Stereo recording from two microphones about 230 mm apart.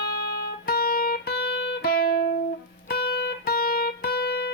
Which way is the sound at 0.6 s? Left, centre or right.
Left.